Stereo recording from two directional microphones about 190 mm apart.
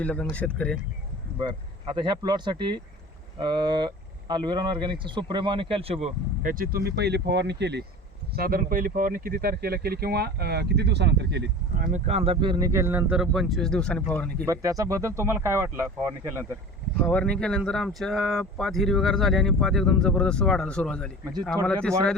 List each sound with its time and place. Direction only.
0.0 s speech: 5° left (ahead or behind)
1.4 s speech: 25° right (ahead or behind)
6.4 s speech: 45° right (ahead or behind); by 7.9 s 65° right (ahead or behind)
8.4 s speech: 50° right (ahead or behind)
11.8 s speech: 40° right (ahead or behind); by 14.4 s 5° left (ahead or behind)
14.4 s speech: 15° right (ahead or behind)
17.0 s speech: 5° left (ahead or behind)